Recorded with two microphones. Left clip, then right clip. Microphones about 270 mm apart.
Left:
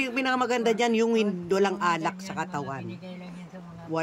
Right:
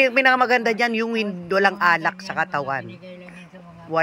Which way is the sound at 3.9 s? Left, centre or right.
Centre.